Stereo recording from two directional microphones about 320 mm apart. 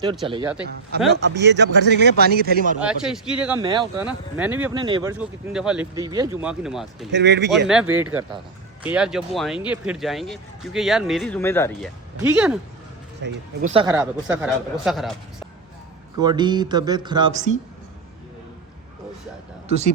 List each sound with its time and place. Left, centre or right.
0.3 s speech: centre
1.1 s speech: right
2.8 s speech: centre
3.6 s speech: centre
7.1 s speech: right
7.7 s speech: centre
12.2 s speech: centre
13.2 s speech: right; by 15.4 s centre
16.1 s speech: centre
19.6 s speech: centre